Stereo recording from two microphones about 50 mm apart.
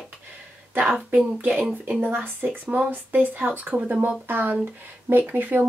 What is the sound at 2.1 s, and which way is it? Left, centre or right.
Speech, right.